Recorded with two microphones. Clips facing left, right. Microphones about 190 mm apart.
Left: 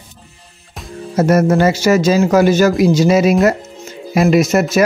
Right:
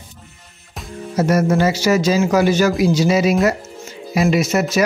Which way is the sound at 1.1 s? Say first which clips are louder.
Left 4 dB; 50° left (ahead or behind).